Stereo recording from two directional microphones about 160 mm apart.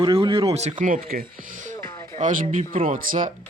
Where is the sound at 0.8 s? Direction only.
65° right (ahead or behind).